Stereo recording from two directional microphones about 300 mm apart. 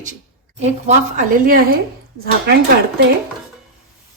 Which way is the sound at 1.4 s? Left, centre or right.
Right.